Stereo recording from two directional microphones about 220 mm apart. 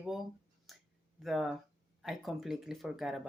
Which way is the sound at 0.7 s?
Centre (ahead or behind).